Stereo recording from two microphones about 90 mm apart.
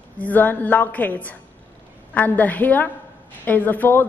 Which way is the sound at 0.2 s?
20° left (ahead or behind).